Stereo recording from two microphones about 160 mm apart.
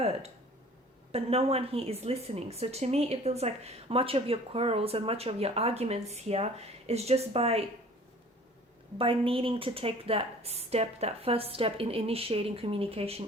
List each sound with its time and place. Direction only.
0.0 s speech: 40° right (ahead or behind)
9.0 s speech: 35° right (ahead or behind)